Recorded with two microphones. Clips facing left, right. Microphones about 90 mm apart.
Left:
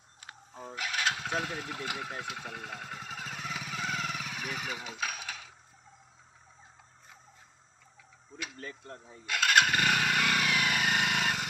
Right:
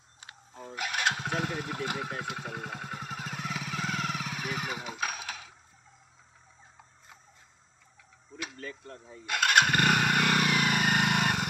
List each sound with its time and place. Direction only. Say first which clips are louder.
1.0 s vehicle: right 2 dB; 20° right (ahead or behind)
4.6 s a sound: right 2 dB; 15° right (ahead or behind)
9.3 s motorcycle: right 1 dB; 5° right (ahead or behind)
10.5 s vehicle: right 2 dB; 10° right (ahead or behind)